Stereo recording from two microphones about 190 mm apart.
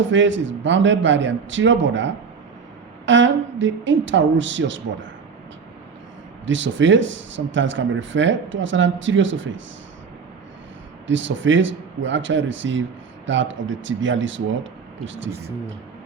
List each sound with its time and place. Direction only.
0.1 s a man's voice: 75° right (ahead or behind)
6.4 s speech: 80° right
11.0 s speech: 80° right